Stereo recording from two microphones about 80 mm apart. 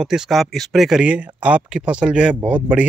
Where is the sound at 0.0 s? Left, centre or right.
Centre.